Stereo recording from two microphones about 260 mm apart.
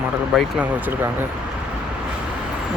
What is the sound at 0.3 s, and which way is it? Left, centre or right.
Speech, centre.